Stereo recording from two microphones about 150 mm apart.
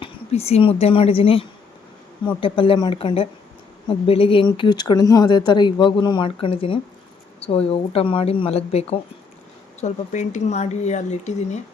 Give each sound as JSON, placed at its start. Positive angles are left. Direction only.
{"t": 0.0, "sound": "speech", "side_deg": 45}